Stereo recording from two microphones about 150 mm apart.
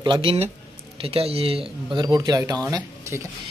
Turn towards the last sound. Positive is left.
turn(degrees=-20)  # may be behind; listen again after turning